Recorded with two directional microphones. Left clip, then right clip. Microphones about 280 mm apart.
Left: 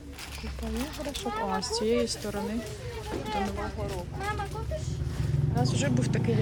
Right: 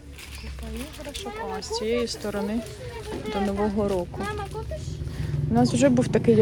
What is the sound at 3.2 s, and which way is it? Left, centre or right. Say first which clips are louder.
Speech: right 7 dB; right.